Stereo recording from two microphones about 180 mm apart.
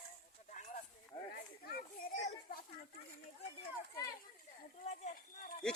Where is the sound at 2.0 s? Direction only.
55° left (ahead or behind).